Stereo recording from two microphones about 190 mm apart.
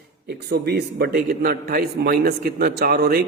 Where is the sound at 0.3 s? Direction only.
55° right (ahead or behind).